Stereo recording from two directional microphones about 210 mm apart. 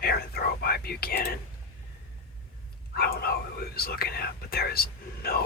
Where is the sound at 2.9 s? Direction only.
45° left (ahead or behind).